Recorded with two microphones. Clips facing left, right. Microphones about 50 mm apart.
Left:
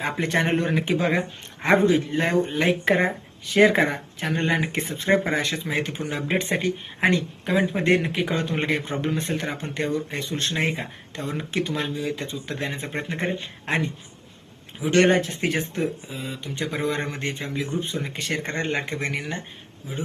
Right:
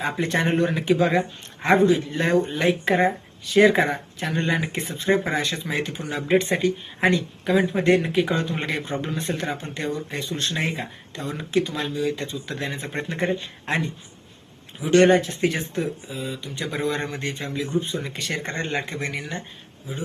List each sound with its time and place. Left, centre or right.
0.0 s speech: left
12.9 s speech: left
14.8 s speech: left